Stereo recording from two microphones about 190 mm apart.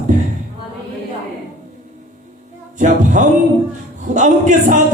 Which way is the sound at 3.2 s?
40° right (ahead or behind).